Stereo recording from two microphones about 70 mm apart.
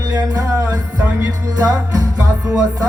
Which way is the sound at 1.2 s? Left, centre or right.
Right.